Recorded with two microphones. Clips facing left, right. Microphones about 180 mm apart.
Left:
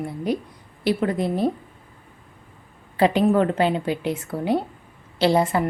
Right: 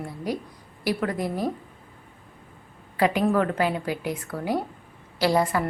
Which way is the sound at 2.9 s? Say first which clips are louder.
Left 4 dB; 25° left (ahead or behind).